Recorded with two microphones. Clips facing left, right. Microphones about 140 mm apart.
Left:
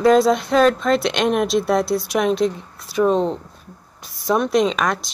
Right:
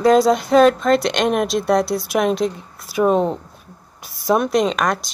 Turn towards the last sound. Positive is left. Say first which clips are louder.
# right 1 dB
turn(degrees=0)  # may be behind; listen again after turning